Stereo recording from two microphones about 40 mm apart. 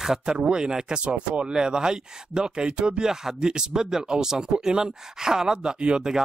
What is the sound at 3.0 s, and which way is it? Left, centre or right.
Speech, centre.